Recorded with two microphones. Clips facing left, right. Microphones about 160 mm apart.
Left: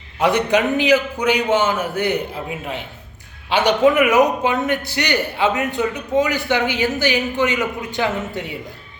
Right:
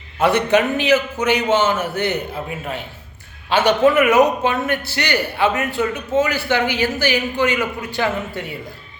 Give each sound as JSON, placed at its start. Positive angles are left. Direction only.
{"t": 0.2, "sound": "a man's voice", "side_deg": 15}